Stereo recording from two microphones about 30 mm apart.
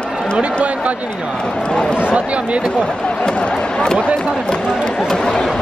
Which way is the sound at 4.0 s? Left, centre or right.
Right.